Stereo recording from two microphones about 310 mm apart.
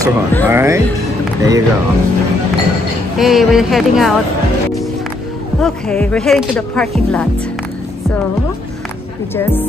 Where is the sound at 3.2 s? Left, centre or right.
Centre.